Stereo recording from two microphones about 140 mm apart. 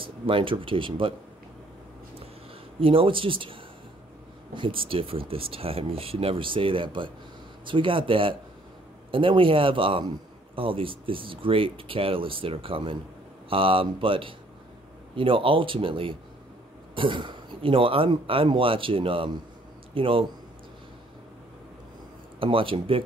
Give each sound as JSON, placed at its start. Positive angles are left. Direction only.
{"t": 0.0, "sound": "speech", "side_deg": -40}
{"t": 2.8, "sound": "a man's voice", "side_deg": -40}
{"t": 4.6, "sound": "a man's voice", "side_deg": -40}
{"t": 22.4, "sound": "a man's voice", "side_deg": -40}